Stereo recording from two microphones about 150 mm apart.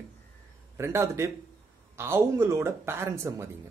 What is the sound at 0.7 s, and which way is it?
Speech, 20° right (ahead or behind).